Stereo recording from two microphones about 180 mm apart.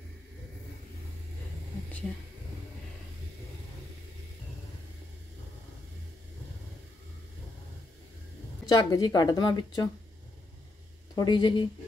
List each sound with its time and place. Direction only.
8.6 s a woman's voice: 20° left (ahead or behind)
11.1 s a woman's voice: 25° left (ahead or behind)